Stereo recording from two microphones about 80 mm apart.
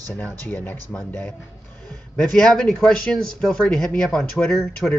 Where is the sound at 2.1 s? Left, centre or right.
Centre.